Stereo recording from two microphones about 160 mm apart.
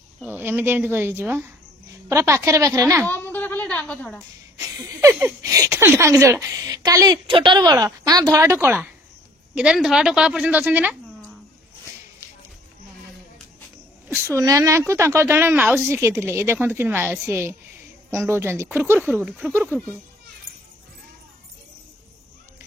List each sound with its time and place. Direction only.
0.2 s a woman's voice: 10° right (ahead or behind)
3.1 s a sound: 10° left (ahead or behind)
4.6 s a woman's voice: 20° right (ahead or behind)
9.6 s a woman's voice: 5° right (ahead or behind)
14.0 s a woman's voice: 10° right (ahead or behind)
19.7 s a child's voice: 5° left (ahead or behind)